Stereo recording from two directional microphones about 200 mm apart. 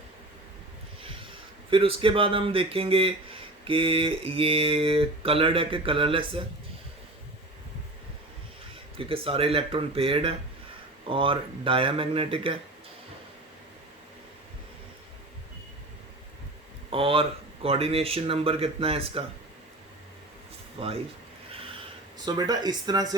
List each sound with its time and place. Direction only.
1.0 s speech: 25° right (ahead or behind)
9.0 s speech: 25° right (ahead or behind)
16.9 s speech: 25° right (ahead or behind)
20.7 s speech: 30° right (ahead or behind)
22.3 s speech: 20° right (ahead or behind)